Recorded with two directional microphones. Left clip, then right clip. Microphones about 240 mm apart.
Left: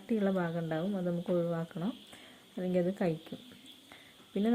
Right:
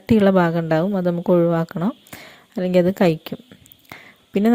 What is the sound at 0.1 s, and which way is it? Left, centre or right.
A woman's voice, right.